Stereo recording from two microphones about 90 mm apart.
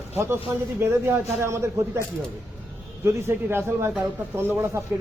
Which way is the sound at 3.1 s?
30° right (ahead or behind).